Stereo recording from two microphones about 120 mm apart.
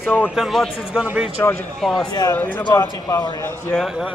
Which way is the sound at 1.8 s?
5° left (ahead or behind).